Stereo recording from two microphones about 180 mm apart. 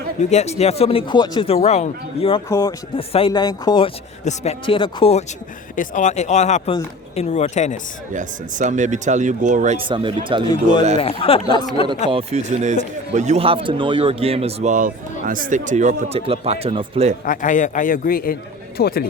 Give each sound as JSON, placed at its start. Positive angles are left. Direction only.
{"t": 0.2, "sound": "speech", "side_deg": 40}
{"t": 2.5, "sound": "speech", "side_deg": 20}
{"t": 4.2, "sound": "speech", "side_deg": 40}
{"t": 4.6, "sound": "speech", "side_deg": 30}
{"t": 5.7, "sound": "speech", "side_deg": 45}
{"t": 8.1, "sound": "speech", "side_deg": -45}
{"t": 9.9, "sound": "speech", "side_deg": -30}
{"t": 10.5, "sound": "speech", "side_deg": 25}
{"t": 12.1, "sound": "speech", "side_deg": -40}
{"t": 17.2, "sound": "a man's voice", "side_deg": 45}